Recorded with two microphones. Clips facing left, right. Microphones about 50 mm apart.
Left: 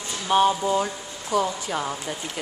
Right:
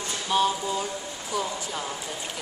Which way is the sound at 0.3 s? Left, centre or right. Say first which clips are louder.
Left 5 dB; left.